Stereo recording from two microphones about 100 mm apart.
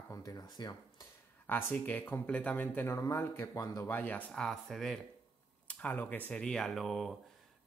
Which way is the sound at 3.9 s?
20° left (ahead or behind).